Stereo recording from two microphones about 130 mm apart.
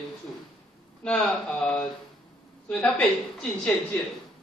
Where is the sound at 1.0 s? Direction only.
5° left (ahead or behind).